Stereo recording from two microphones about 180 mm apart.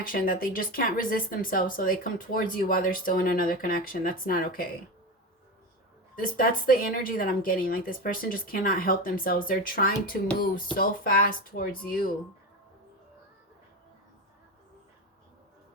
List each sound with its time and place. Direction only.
0.0 s speech: 50° left (ahead or behind)
6.1 s speech: 50° left (ahead or behind)